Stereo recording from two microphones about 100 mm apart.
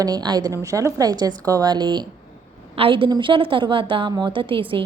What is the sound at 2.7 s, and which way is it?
A woman's voice, 65° right (ahead or behind).